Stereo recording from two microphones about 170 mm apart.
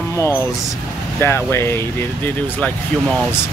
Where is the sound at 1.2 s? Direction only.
15° left (ahead or behind).